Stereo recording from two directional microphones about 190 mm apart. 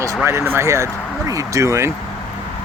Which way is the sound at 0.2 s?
10° right (ahead or behind).